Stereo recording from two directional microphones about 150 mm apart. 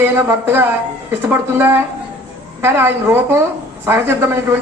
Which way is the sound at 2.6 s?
15° right (ahead or behind).